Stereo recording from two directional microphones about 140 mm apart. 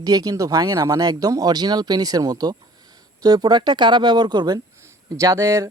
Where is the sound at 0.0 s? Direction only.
25° right (ahead or behind).